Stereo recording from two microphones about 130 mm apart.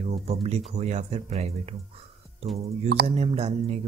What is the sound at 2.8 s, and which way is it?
Speech, 50° right (ahead or behind).